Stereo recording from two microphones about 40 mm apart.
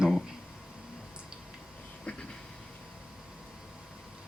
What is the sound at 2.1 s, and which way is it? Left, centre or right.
Vehicle, left.